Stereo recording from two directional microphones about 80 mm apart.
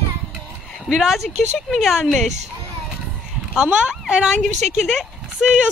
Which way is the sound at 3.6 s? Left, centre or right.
Centre.